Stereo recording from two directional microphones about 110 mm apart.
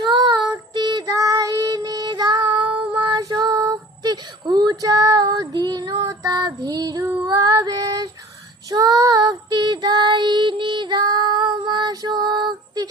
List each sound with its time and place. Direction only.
0.0 s child singing: 40° right (ahead or behind)